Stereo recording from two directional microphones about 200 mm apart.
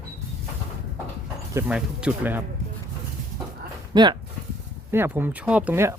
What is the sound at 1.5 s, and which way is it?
Speech, 5° right (ahead or behind).